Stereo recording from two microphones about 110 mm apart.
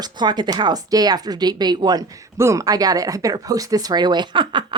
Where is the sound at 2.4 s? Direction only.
30° right (ahead or behind).